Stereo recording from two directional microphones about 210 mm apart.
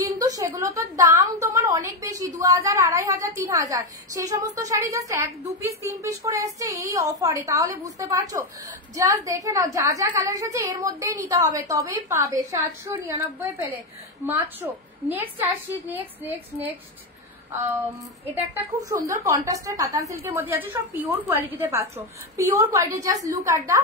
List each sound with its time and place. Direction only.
0.0 s a woman's voice: 15° right (ahead or behind)
18.3 s a woman's voice: 15° right (ahead or behind)